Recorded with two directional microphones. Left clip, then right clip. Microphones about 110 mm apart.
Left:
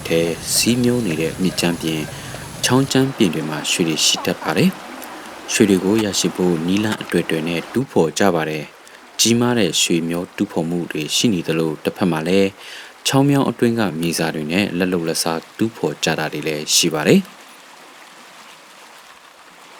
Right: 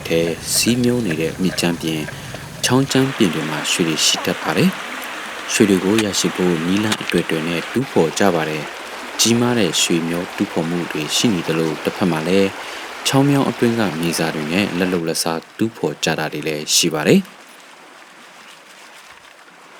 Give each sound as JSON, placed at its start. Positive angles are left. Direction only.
{"t": 0.0, "sound": "speech", "side_deg": 0}
{"t": 6.9, "sound": "speech", "side_deg": -20}
{"t": 7.3, "sound": "speech", "side_deg": 0}